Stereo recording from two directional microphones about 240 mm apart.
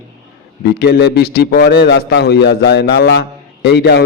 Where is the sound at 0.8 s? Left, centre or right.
Left.